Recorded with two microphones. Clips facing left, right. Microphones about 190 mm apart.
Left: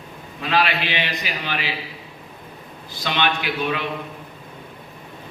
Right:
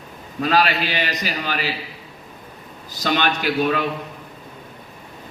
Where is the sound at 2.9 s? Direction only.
45° right (ahead or behind).